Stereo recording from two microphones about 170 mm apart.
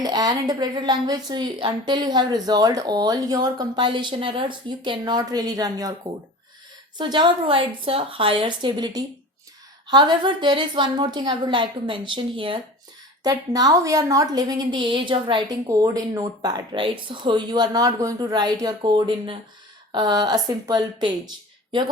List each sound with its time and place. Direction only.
0.0 s a woman's voice: 20° right (ahead or behind)
7.0 s a woman's voice: 30° right (ahead or behind)